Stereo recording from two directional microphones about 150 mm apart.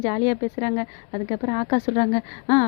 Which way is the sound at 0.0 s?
30° left (ahead or behind).